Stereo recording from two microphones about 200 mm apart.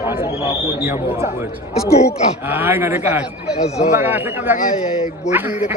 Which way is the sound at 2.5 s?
10° right (ahead or behind).